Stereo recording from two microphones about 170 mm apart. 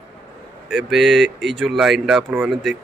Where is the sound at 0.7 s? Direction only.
Centre (ahead or behind).